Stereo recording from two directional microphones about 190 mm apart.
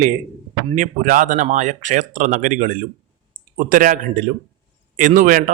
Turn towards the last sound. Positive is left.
turn(degrees=-45)  # may be behind; listen again after turning